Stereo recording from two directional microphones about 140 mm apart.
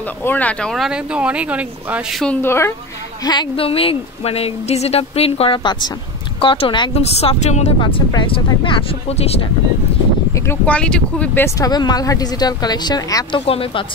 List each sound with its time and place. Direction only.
0.2 s speech: 10° left (ahead or behind)
2.4 s speech: 20° left (ahead or behind)
3.3 s speech: 35° left (ahead or behind)
6.9 s speech: 45° left (ahead or behind)
7.8 s speech: 35° left (ahead or behind)
9.1 s speech: 45° left (ahead or behind)
10.3 s speech: 20° left (ahead or behind)
13.5 s speech: 40° left (ahead or behind)